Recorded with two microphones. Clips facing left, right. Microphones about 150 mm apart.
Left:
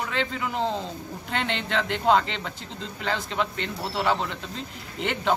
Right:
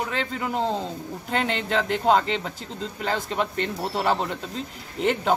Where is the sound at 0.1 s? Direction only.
40° right (ahead or behind).